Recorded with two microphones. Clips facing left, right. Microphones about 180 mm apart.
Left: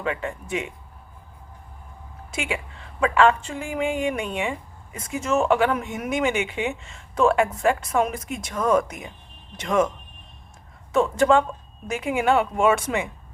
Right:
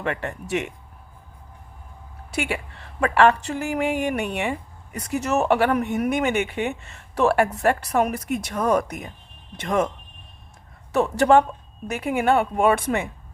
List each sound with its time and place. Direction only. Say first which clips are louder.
0.0 s a woman's voice: even; 70° right (ahead or behind)
3.0 s a woman's voice: right 1 dB; 70° right (ahead or behind)
4.4 s a sound: right 2 dB; 40° right (ahead or behind)
5.0 s a woman's voice: even; 65° right (ahead or behind)
9.6 s a woman's voice: left 1 dB; 55° right (ahead or behind)
10.9 s a woman's voice: right 1 dB; 65° right (ahead or behind)
11.9 s a woman's voice: right 1 dB; 50° right (ahead or behind)